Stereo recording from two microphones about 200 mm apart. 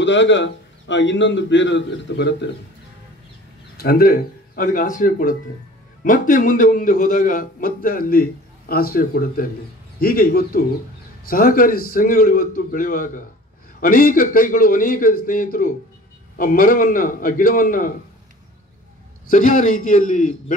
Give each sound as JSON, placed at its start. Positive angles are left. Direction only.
{"t": 0.0, "sound": "a man's voice", "side_deg": 65}
{"t": 3.7, "sound": "a man's voice", "side_deg": 50}
{"t": 19.2, "sound": "a man's voice", "side_deg": 40}